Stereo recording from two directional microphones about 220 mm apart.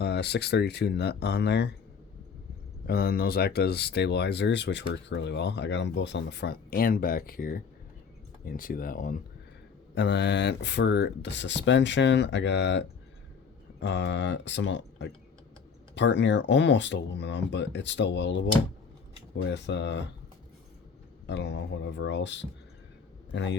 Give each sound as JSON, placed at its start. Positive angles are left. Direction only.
{"t": 0.0, "sound": "speech", "side_deg": 50}
{"t": 2.8, "sound": "speech", "side_deg": 45}
{"t": 9.9, "sound": "speech", "side_deg": 50}
{"t": 19.5, "sound": "speech", "side_deg": 55}
{"t": 21.2, "sound": "speech", "side_deg": 50}